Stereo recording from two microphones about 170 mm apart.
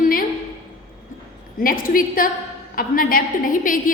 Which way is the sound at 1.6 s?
55° left (ahead or behind).